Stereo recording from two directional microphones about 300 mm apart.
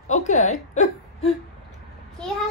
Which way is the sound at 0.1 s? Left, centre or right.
Left.